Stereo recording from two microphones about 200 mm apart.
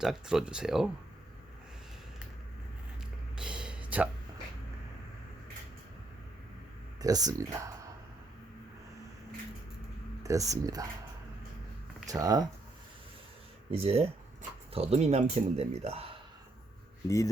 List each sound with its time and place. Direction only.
0.0 s speech: centre (ahead or behind)
3.3 s a sound: 5° right (ahead or behind)
7.0 s speech: 20° right (ahead or behind)
10.2 s speech: 15° right (ahead or behind)
12.0 s speech: 15° right (ahead or behind)
13.7 s speech: 30° right (ahead or behind)